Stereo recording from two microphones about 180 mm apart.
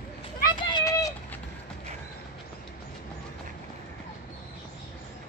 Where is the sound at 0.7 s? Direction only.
20° left (ahead or behind).